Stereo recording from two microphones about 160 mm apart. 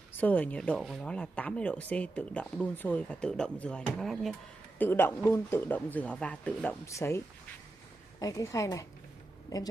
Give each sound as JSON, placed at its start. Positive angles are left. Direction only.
{"t": 0.2, "sound": "speech", "side_deg": 10}
{"t": 4.8, "sound": "a woman's voice", "side_deg": 15}